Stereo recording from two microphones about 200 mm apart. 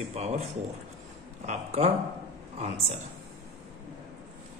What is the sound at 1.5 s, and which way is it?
Speech, 30° right (ahead or behind).